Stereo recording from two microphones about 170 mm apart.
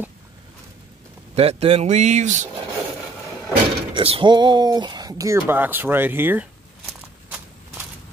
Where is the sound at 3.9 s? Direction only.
30° right (ahead or behind); by 6.4 s 10° right (ahead or behind).